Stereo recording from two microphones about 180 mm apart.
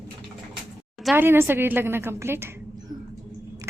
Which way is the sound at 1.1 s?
10° right (ahead or behind).